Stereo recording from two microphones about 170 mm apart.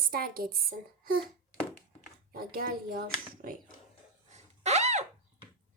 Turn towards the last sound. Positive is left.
turn(degrees=-40)  # may be behind; listen again after turning